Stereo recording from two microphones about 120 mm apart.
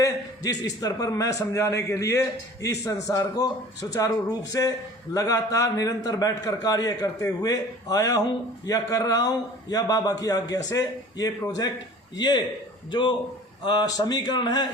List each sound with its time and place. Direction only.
0.0 s a man's voice: 30° left (ahead or behind)